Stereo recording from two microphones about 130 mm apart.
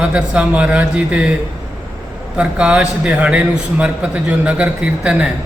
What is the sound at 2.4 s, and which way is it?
A man's voice, 10° right (ahead or behind).